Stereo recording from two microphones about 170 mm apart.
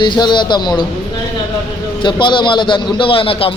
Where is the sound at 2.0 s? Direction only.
25° left (ahead or behind).